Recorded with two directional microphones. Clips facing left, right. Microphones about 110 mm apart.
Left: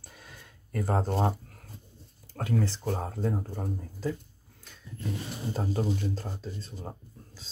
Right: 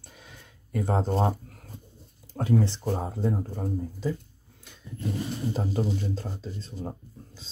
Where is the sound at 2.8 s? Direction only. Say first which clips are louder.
Right 3 dB; 10° right (ahead or behind).